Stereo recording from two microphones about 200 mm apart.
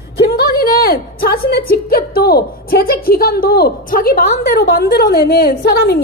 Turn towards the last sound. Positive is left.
turn(degrees=55)  # may be behind; listen again after turning